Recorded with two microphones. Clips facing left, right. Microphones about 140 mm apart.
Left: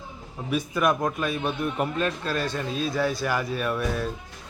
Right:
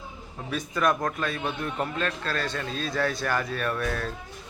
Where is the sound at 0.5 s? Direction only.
10° left (ahead or behind).